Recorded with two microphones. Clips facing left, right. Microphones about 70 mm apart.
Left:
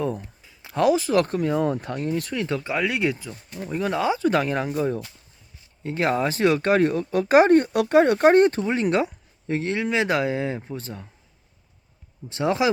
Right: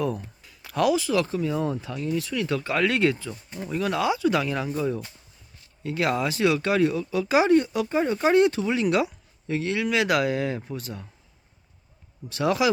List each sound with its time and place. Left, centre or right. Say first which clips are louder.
0.4 s speech: left 3 dB; left
2.3 s speech: even; left
2.6 s speech: right 3 dB; centre
3.7 s speech: left 1 dB; left
8.2 s speech: left 4 dB; left
12.3 s speech: left 1 dB; left